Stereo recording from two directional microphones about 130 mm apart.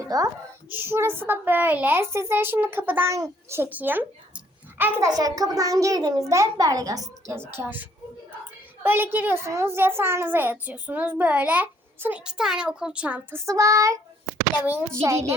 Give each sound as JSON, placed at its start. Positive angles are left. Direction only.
{"t": 0.1, "sound": "a child's voice", "side_deg": -30}
{"t": 0.7, "sound": "a woman's voice", "side_deg": -20}
{"t": 5.0, "sound": "a child's voice", "side_deg": -30}
{"t": 7.5, "sound": "a woman's voice", "side_deg": -15}
{"t": 13.4, "sound": "a child's voice", "side_deg": -25}
{"t": 15.0, "sound": "a child's voice", "side_deg": -25}